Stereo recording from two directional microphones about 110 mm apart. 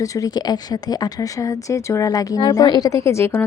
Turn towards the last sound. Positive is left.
turn(degrees=25)  # may be behind; listen again after turning